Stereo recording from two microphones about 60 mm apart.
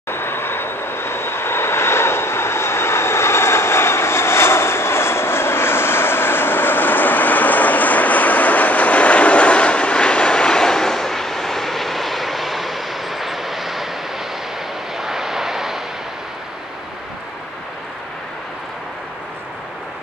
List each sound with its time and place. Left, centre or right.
0.1 s vehicle: left; by 13.8 s centre
15.0 s vehicle: centre